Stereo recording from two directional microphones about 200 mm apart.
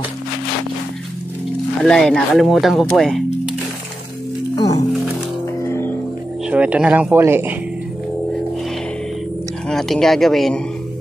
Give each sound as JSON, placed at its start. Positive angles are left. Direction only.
{"t": 1.9, "sound": "speech", "side_deg": 5}
{"t": 4.6, "sound": "speech", "side_deg": 20}
{"t": 5.6, "sound": "music", "side_deg": 10}
{"t": 6.5, "sound": "speech", "side_deg": -5}
{"t": 9.7, "sound": "speech", "side_deg": 0}